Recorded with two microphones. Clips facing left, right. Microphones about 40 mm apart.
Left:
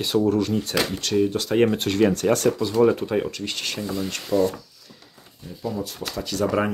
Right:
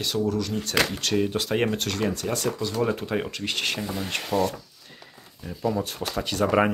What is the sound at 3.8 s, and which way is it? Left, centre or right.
Speech, right.